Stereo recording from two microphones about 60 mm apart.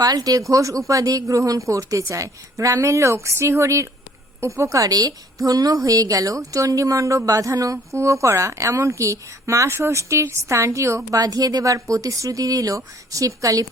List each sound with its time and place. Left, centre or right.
0.1 s a woman's voice: right
4.8 s a woman's voice: right
11.2 s a woman's voice: right